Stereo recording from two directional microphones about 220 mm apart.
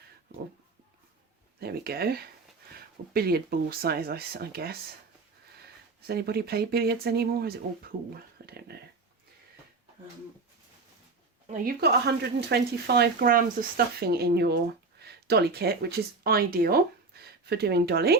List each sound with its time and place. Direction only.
1.5 s speech: 45° right (ahead or behind)
6.1 s speech: 45° right (ahead or behind)
11.5 s speech: 45° right (ahead or behind)